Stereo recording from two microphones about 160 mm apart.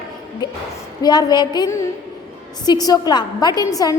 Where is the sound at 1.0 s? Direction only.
25° left (ahead or behind).